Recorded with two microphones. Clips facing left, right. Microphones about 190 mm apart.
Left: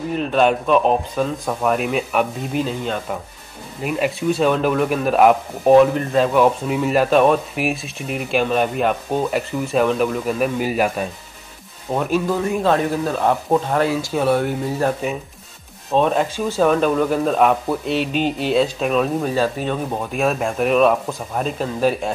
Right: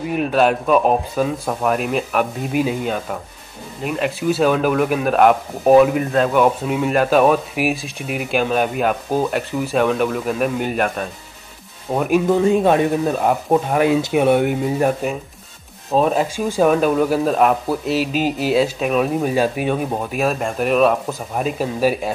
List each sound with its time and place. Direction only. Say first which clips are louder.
0.1 s speech: right 1 dB; 5° right (ahead or behind)
11.9 s speech: right 3 dB; 10° right (ahead or behind)
12.3 s speech: right 6 dB; 25° right (ahead or behind)
15.9 s speech: right 1 dB; 5° right (ahead or behind)